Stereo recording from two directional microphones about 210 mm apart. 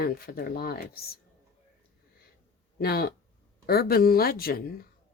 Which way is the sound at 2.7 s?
45° left (ahead or behind).